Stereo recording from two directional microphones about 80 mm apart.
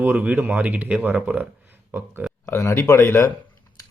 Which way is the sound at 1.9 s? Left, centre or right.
Right.